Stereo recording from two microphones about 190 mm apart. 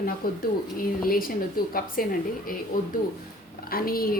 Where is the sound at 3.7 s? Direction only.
50° left (ahead or behind).